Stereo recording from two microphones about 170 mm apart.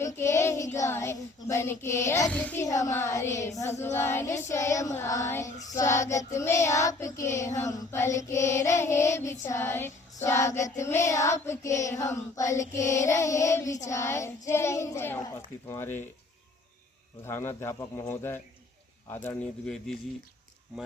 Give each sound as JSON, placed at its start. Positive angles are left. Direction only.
{"t": 0.0, "sound": "child singing", "side_deg": 20}
{"t": 2.2, "sound": "child singing", "side_deg": 5}
{"t": 2.6, "sound": "child singing", "side_deg": 20}
{"t": 17.2, "sound": "child singing", "side_deg": 15}